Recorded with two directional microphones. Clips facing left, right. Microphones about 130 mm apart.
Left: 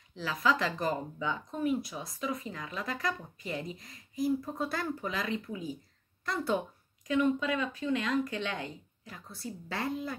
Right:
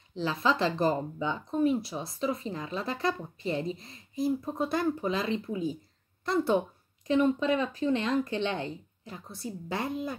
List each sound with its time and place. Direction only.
0.1 s speech: 25° right (ahead or behind)